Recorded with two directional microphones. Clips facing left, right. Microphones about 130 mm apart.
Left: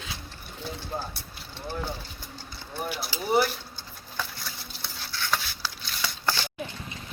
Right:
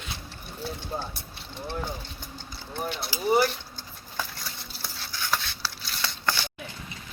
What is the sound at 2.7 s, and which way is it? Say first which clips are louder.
Speech: even; 5° left (ahead or behind).